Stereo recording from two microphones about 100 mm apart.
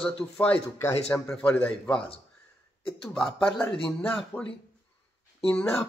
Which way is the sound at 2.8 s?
10° left (ahead or behind).